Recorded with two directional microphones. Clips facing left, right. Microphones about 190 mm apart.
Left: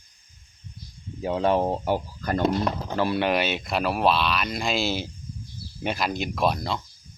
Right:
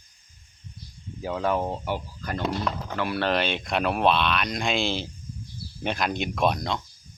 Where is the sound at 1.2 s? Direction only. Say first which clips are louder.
Left 4 dB; 25° left (ahead or behind); by 2.5 s 40° left (ahead or behind).